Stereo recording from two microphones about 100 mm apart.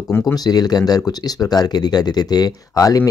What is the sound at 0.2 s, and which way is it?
Speech, 40° left (ahead or behind).